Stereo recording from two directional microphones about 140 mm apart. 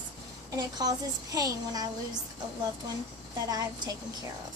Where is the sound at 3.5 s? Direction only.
25° right (ahead or behind).